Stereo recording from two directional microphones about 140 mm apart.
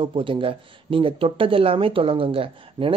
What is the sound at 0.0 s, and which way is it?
Speech, 35° right (ahead or behind).